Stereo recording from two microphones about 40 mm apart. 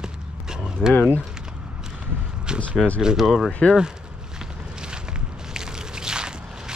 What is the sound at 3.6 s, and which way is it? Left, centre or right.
Speech, left.